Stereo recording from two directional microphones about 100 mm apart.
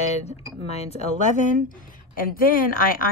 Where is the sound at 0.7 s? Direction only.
90° left.